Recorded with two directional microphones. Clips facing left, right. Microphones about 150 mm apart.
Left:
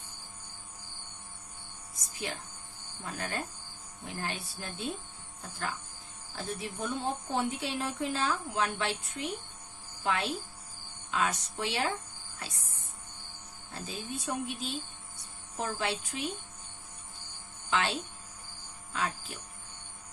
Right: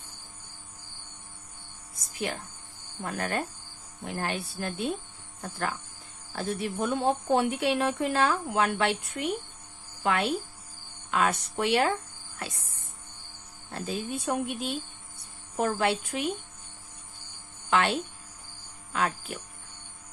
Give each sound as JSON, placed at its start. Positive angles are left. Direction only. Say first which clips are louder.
{"t": 3.0, "sound": "a woman's voice", "louder": "right 6 dB", "side_deg": -60}
{"t": 13.7, "sound": "a woman's voice", "louder": "right 7 dB", "side_deg": -60}
{"t": 17.7, "sound": "speech", "louder": "right 5 dB", "side_deg": -60}
{"t": 18.9, "sound": "a woman's voice", "louder": "right 5 dB", "side_deg": -60}